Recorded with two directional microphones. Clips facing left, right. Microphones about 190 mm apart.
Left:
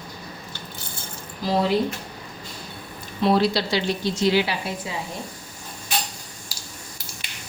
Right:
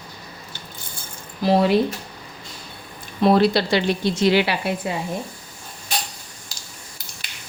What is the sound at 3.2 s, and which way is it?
Speech, 55° right (ahead or behind).